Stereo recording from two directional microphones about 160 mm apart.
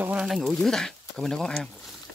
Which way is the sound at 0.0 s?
5° right (ahead or behind).